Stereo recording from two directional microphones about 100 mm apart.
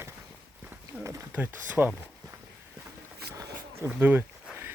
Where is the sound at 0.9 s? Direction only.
15° right (ahead or behind).